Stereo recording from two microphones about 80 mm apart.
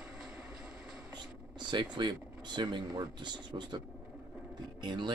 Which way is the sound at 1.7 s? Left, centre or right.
Right.